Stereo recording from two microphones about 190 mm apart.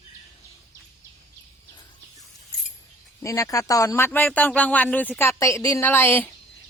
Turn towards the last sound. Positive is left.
turn(degrees=10)  # may be behind; listen again after turning